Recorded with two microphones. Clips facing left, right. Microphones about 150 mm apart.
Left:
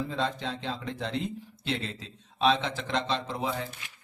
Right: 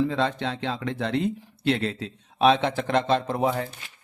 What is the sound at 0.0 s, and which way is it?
Speech, 70° right (ahead or behind).